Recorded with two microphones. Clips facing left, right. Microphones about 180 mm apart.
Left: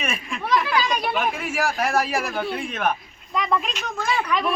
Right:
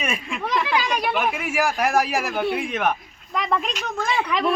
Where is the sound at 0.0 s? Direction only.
15° right (ahead or behind).